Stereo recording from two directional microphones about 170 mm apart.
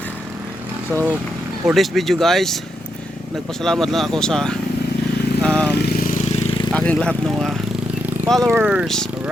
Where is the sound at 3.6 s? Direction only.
Centre (ahead or behind).